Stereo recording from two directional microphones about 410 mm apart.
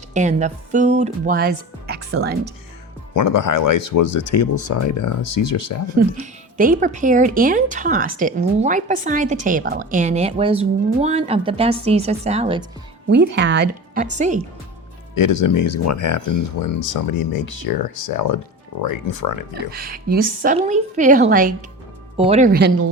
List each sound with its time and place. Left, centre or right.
0.1 s speech: centre
3.2 s speech: left
4.0 s speech: left
6.6 s speech: centre
13.1 s a woman's voice: right
15.2 s speech: left
19.5 s a woman's voice: right